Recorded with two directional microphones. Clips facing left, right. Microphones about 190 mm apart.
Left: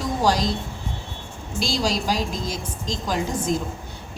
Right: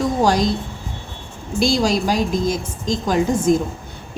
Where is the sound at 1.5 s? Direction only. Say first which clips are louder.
Right 7 dB; 55° right (ahead or behind).